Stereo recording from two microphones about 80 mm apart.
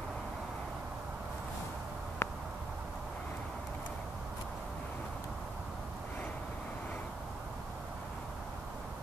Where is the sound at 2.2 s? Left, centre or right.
Left.